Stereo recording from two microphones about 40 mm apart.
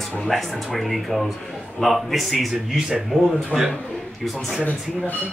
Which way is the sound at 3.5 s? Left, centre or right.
Centre.